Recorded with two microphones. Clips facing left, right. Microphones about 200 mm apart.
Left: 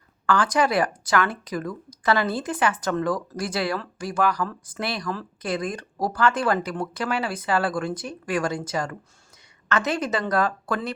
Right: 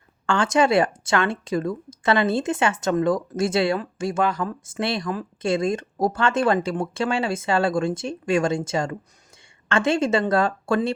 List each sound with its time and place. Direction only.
0.3 s speech: 25° right (ahead or behind)